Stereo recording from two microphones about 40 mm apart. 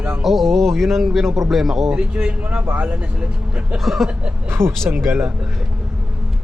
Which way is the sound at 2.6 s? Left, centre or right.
Right.